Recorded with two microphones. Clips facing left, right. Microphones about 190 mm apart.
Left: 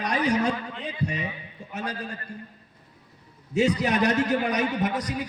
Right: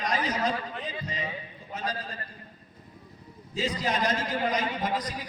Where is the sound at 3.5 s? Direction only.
70° left (ahead or behind).